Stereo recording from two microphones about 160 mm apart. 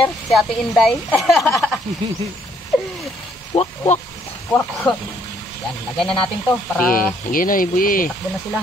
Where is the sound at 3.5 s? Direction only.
40° left (ahead or behind).